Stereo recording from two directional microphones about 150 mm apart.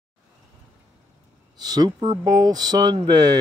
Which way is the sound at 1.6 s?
25° right (ahead or behind).